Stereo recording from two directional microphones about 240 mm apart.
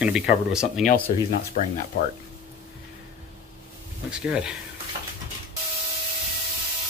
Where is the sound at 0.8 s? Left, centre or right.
Left.